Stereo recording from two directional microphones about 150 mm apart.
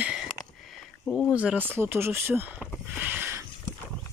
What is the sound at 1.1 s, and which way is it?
Speech, 10° left (ahead or behind).